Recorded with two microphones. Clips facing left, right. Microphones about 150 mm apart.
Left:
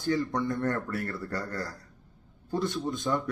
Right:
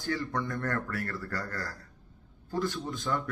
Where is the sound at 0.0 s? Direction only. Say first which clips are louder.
Left 4 dB; 20° left (ahead or behind).